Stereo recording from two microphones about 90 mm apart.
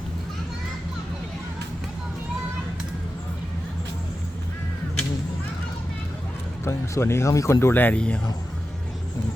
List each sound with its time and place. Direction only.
6.7 s speech: 30° left (ahead or behind); by 8.2 s 15° left (ahead or behind)